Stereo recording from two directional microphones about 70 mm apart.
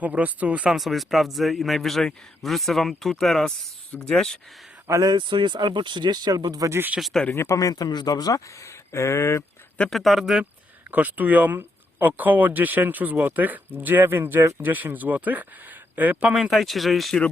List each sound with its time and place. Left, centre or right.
0.0 s speech: right
0.7 s a man's voice: centre
5.0 s speech: right
7.0 s speech: centre
7.3 s speech: left
9.9 s a man's voice: centre
10.9 s speech: right
16.3 s a man's voice: centre